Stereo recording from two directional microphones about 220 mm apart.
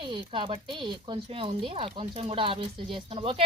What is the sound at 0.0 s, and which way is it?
Speech, 20° right (ahead or behind).